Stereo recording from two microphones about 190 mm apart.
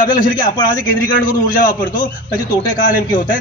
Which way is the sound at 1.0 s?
45° left (ahead or behind).